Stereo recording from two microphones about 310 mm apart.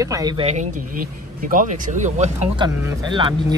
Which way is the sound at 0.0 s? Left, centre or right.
Centre.